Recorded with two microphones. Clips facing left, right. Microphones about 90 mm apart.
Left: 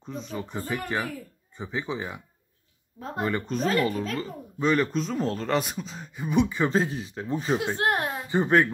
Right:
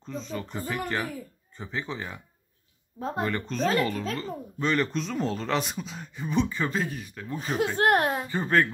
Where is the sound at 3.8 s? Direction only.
15° left (ahead or behind).